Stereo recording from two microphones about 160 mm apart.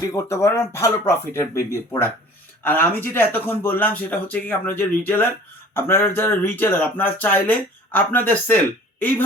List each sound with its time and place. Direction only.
0.1 s speech: 20° left (ahead or behind)